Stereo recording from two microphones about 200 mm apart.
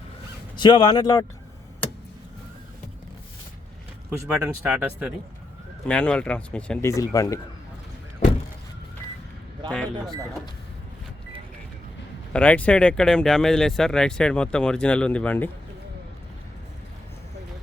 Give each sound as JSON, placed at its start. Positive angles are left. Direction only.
{"t": 0.6, "sound": "speech", "side_deg": 20}
{"t": 4.3, "sound": "speech", "side_deg": -5}
{"t": 5.9, "sound": "speech", "side_deg": 5}
{"t": 6.9, "sound": "speech", "side_deg": 15}
{"t": 9.6, "sound": "speech", "side_deg": 5}
{"t": 12.3, "sound": "speech", "side_deg": 5}